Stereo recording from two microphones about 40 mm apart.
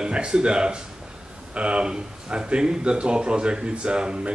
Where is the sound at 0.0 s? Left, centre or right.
Right.